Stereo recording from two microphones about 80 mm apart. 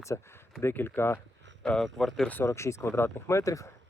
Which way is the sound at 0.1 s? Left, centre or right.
Left.